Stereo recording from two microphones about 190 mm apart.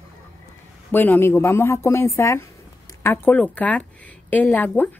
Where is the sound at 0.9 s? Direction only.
10° left (ahead or behind).